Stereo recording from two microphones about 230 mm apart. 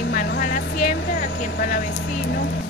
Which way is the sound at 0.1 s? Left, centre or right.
Left.